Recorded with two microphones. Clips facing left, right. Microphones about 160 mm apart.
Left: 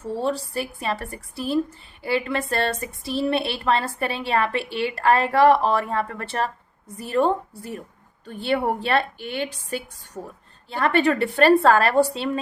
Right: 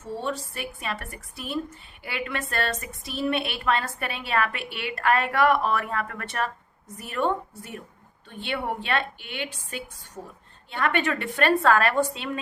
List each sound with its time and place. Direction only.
0.2 s a woman's voice: 35° left (ahead or behind)